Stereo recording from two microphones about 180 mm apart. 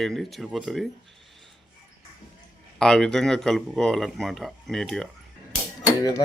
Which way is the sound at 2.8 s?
5° left (ahead or behind).